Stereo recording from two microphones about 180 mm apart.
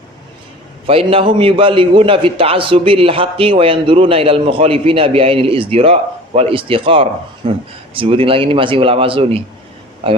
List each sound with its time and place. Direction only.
0.9 s a man's voice: 30° right (ahead or behind)